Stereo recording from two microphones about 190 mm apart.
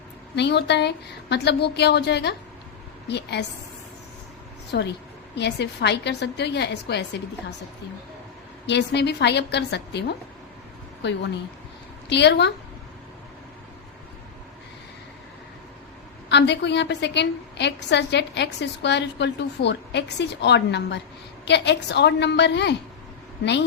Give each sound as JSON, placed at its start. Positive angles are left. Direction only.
{"t": 0.3, "sound": "a woman's voice", "side_deg": 65}
{"t": 4.7, "sound": "a woman's voice", "side_deg": 65}
{"t": 8.6, "sound": "a woman's voice", "side_deg": 65}
{"t": 12.0, "sound": "a woman's voice", "side_deg": 65}
{"t": 16.3, "sound": "a woman's voice", "side_deg": 65}